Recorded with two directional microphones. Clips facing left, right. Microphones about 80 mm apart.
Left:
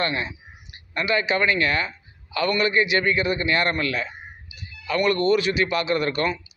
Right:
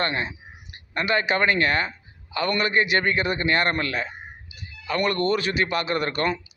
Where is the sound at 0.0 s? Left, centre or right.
Right.